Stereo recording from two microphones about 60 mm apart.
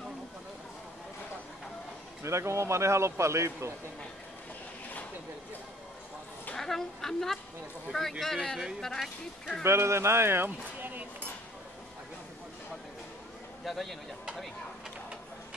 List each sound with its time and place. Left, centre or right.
2.2 s speech: right
6.5 s a woman's voice: centre
9.6 s speech: right
13.7 s a man's voice: centre